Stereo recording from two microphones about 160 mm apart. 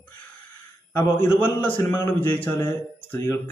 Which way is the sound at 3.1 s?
20° left (ahead or behind).